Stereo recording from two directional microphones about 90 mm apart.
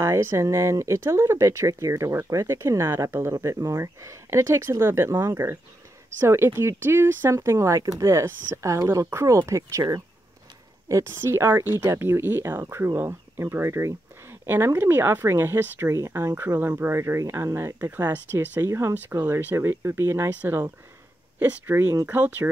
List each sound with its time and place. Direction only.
0.0 s speech: 30° right (ahead or behind)
18.6 s speech: 35° right (ahead or behind)
21.4 s speech: 20° right (ahead or behind)
21.8 s speech: 40° right (ahead or behind)
22.1 s speech: 20° right (ahead or behind)